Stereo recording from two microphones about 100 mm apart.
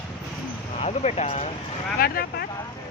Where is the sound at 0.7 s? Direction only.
90° left.